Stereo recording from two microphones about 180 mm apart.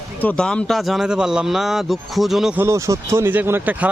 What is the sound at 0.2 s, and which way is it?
Speech, 5° left (ahead or behind).